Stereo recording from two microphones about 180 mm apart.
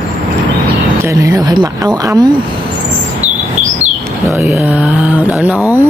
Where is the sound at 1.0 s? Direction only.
20° right (ahead or behind).